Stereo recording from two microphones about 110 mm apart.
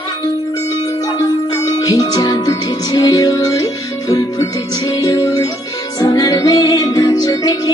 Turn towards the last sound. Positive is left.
turn(degrees=35)  # may be behind; listen again after turning